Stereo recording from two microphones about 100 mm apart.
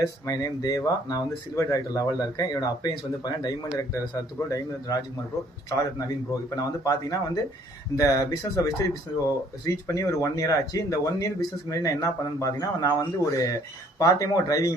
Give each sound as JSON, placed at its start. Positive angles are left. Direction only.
{"t": 0.0, "sound": "speech", "side_deg": 35}